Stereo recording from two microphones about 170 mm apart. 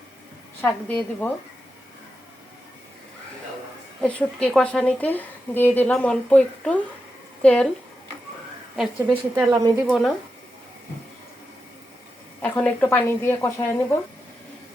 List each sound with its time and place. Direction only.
0.6 s a woman's voice: 10° left (ahead or behind)
4.0 s a woman's voice: 5° left (ahead or behind)
8.7 s a woman's voice: centre (ahead or behind)
9.3 s speech: 20° right (ahead or behind)
9.9 s speech: centre (ahead or behind)
12.4 s a woman's voice: 10° left (ahead or behind)